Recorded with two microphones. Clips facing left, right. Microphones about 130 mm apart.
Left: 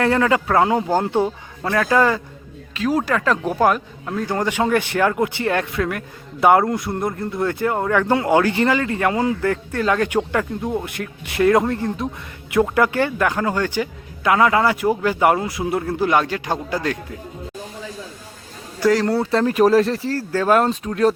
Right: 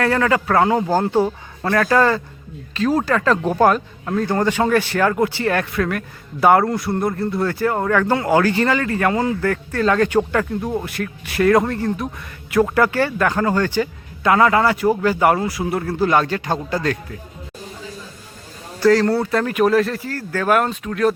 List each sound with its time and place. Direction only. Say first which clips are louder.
0.0 s a man's voice: even; 20° left (ahead or behind)
18.8 s speech: right 3 dB; 15° left (ahead or behind)
19.2 s speech: left 2 dB; 25° left (ahead or behind)